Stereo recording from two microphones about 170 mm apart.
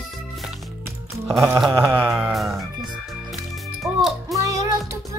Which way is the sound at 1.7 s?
15° right (ahead or behind).